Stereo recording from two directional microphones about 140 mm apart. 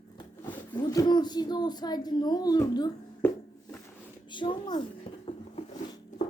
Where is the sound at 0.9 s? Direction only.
30° left (ahead or behind).